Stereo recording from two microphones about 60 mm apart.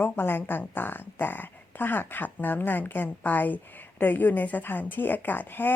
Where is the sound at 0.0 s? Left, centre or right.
Left.